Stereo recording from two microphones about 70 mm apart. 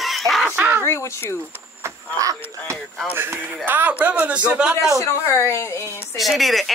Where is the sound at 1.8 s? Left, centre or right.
Right.